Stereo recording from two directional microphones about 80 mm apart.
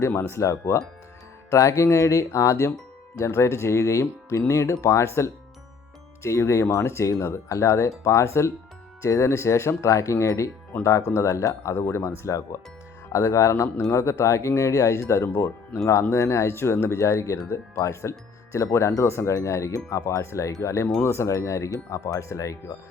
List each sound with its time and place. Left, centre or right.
0.2 s speech: left